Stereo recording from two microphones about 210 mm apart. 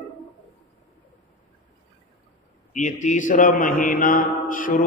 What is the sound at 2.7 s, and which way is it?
A man's voice, 35° left (ahead or behind).